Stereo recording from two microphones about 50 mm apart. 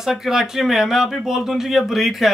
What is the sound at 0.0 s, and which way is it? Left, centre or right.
Speech, centre.